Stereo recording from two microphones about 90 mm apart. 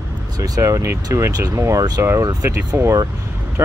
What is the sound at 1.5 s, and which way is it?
Speech, 30° right (ahead or behind).